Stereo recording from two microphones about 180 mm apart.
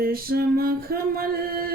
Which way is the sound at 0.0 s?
55° right (ahead or behind).